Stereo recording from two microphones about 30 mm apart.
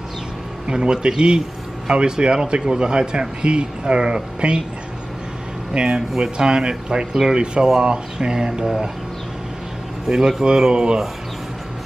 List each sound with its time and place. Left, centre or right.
0.7 s speech: right
5.7 s speech: right
5.9 s speech: centre
6.3 s speech: right
10.0 s speech: centre